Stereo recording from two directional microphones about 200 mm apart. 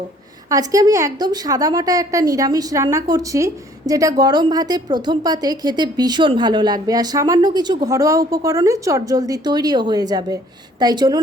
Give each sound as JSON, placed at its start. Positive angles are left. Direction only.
{"t": 0.7, "sound": "a woman's voice", "side_deg": -15}